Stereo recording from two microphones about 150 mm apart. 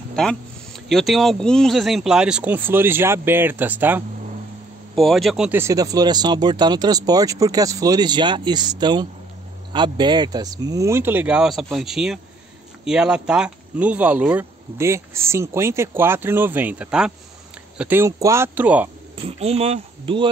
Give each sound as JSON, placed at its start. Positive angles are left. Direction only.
{"t": 0.1, "sound": "speech", "side_deg": 5}
{"t": 4.9, "sound": "speech", "side_deg": 0}
{"t": 5.6, "sound": "speech", "side_deg": -20}
{"t": 19.2, "sound": "speech", "side_deg": -45}